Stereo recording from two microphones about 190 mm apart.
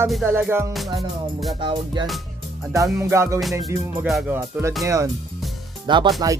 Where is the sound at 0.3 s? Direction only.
10° right (ahead or behind).